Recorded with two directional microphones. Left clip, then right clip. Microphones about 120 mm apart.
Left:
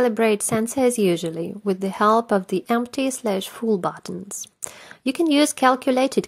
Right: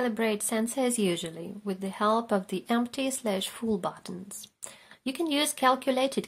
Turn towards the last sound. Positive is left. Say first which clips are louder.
# left 7 dB
turn(degrees=55)  # may be behind; listen again after turning